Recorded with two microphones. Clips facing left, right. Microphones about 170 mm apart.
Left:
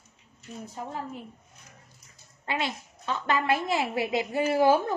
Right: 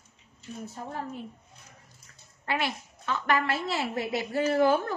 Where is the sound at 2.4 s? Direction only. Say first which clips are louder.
Right 1 dB; 20° left (ahead or behind).